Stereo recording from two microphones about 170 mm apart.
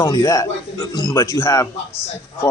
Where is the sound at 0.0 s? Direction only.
20° left (ahead or behind).